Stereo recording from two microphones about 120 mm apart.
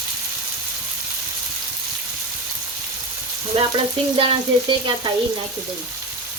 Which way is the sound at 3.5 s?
50° right (ahead or behind).